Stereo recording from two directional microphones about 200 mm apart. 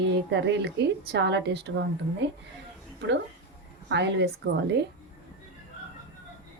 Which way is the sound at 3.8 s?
60° right (ahead or behind).